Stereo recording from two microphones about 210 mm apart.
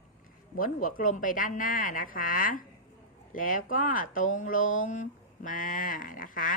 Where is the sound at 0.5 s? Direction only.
40° left (ahead or behind).